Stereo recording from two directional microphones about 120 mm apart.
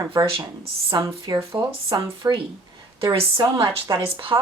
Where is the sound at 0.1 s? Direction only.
45° right (ahead or behind).